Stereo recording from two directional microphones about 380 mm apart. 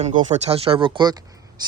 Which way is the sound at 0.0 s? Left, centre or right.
Centre.